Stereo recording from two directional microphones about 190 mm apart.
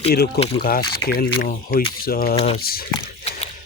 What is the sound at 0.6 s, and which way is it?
Speech, 55° left (ahead or behind).